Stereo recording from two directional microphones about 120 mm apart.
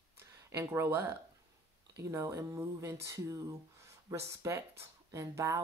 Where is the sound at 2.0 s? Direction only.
25° right (ahead or behind).